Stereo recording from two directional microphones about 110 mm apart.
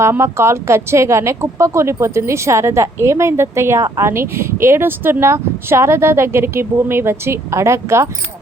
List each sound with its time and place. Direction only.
0.0 s speech: 25° right (ahead or behind)